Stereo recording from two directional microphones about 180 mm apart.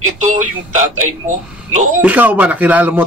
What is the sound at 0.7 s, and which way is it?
A man's voice, 40° right (ahead or behind).